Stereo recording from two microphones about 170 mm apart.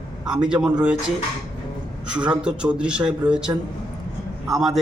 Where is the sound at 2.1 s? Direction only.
5° right (ahead or behind).